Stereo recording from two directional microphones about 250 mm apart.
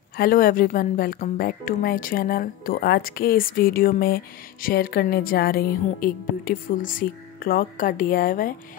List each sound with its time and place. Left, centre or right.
0.2 s a woman's voice: left